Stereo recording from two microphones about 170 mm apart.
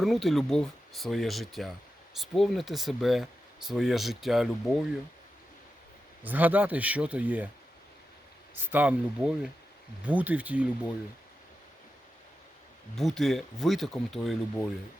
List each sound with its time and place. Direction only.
0.0 s speech: centre (ahead or behind)
6.2 s speech: 10° right (ahead or behind)
8.5 s speech: 10° right (ahead or behind)
13.0 s speech: centre (ahead or behind)